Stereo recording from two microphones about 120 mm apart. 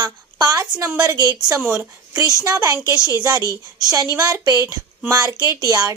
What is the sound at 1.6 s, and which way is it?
A woman's voice, 20° right (ahead or behind).